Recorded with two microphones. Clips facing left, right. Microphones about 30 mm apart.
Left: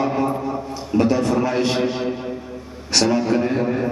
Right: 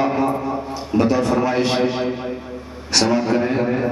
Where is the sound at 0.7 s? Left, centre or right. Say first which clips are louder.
Even; centre.